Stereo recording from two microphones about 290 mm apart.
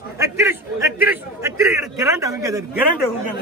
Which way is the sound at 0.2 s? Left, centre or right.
Centre.